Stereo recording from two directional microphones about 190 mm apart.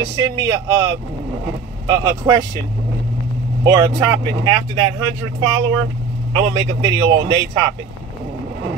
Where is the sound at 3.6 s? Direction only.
20° right (ahead or behind).